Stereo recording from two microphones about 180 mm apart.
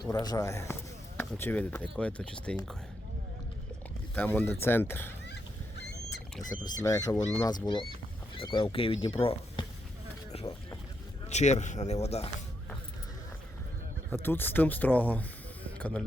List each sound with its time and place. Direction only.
0.0 s speech: 20° left (ahead or behind); by 2.6 s 5° left (ahead or behind)
4.1 s speech: 10° left (ahead or behind)
6.8 s speech: 20° left (ahead or behind)
10.3 s music: 35° left (ahead or behind)
11.3 s speech: 40° left (ahead or behind)
14.1 s speech: 10° left (ahead or behind)